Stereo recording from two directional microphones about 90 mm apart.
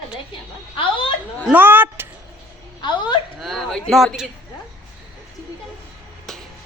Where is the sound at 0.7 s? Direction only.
75° left (ahead or behind).